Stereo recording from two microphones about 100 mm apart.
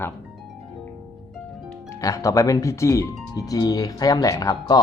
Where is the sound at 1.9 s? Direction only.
35° left (ahead or behind).